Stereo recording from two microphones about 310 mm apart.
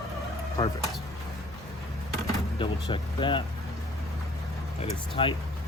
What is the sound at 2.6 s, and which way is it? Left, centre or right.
Speech, centre.